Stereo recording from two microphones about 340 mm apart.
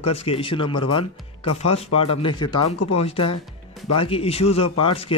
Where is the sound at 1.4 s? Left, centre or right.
Left.